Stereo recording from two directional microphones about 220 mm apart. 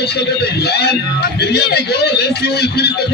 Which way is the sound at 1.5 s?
45° left (ahead or behind).